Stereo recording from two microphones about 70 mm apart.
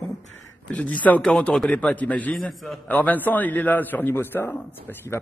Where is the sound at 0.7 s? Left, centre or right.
Centre.